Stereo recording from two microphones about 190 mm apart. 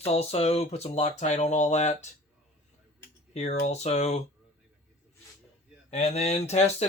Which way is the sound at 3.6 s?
35° left (ahead or behind).